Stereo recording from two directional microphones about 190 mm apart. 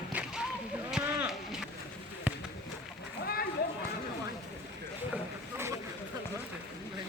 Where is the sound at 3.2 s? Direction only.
55° left (ahead or behind).